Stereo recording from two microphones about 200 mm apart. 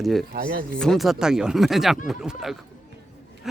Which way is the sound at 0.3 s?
50° right (ahead or behind).